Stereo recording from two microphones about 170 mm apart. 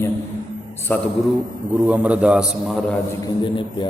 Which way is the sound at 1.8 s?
10° right (ahead or behind).